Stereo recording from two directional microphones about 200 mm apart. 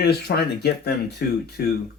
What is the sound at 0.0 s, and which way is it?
Speech, 55° left (ahead or behind).